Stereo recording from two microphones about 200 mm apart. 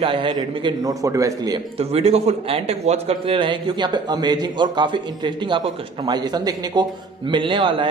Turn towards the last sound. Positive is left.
turn(degrees=-25)  # may be behind; listen again after turning